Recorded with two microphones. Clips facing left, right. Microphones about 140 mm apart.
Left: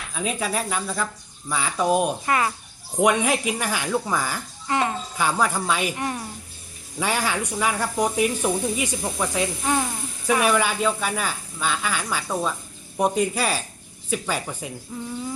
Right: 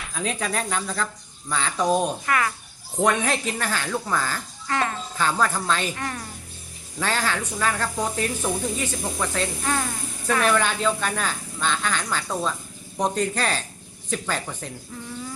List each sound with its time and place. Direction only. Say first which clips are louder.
0.0 s speech: left 1 dB; 5° left (ahead or behind)
2.2 s speech: left 1 dB; 25° left (ahead or behind)
2.9 s speech: left 2 dB; 10° left (ahead or behind)